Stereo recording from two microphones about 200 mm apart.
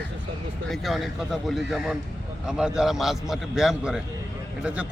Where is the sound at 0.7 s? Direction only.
Centre (ahead or behind).